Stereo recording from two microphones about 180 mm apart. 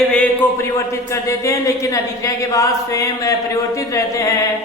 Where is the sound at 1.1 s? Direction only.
15° left (ahead or behind).